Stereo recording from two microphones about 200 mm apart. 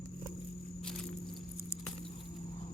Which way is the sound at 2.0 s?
25° left (ahead or behind).